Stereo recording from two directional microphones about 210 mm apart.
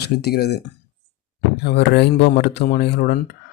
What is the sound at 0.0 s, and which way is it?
Speech, 50° left (ahead or behind).